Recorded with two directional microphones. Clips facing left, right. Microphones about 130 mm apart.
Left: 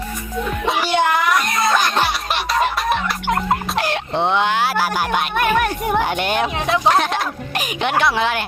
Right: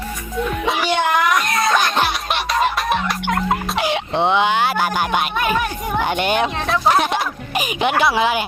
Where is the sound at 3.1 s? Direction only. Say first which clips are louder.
Even; centre (ahead or behind).